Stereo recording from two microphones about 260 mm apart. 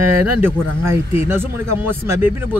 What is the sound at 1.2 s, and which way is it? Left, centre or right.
Speech, centre.